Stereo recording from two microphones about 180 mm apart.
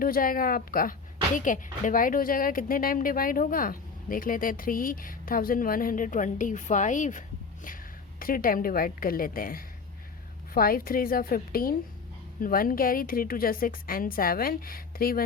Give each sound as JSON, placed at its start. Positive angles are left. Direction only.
{"t": 0.0, "sound": "a woman's voice", "side_deg": 55}